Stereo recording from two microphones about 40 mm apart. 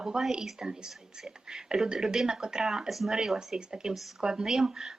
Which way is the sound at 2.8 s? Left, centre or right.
Centre.